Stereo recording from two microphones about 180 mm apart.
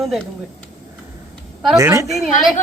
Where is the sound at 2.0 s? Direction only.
Centre (ahead or behind).